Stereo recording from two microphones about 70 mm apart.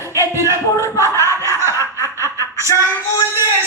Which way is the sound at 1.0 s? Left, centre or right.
Right.